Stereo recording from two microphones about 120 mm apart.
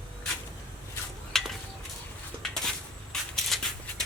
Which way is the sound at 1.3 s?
5° left (ahead or behind).